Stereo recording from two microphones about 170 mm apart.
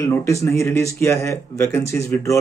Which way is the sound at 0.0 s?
15° left (ahead or behind).